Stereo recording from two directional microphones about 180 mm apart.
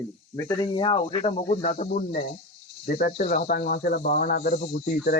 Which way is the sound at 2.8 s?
45° left (ahead or behind).